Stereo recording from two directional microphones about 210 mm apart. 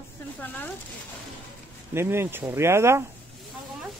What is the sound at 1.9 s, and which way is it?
Speech, 10° right (ahead or behind).